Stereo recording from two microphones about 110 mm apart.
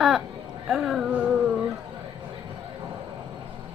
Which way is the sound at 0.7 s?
Centre (ahead or behind).